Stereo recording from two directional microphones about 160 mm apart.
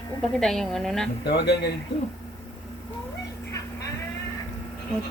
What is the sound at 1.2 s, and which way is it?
Speech, 90° left.